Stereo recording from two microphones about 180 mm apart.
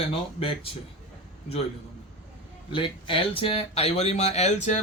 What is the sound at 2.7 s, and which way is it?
Speech, 30° left (ahead or behind).